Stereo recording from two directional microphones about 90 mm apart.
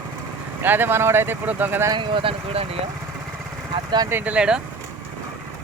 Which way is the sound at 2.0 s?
75° right (ahead or behind).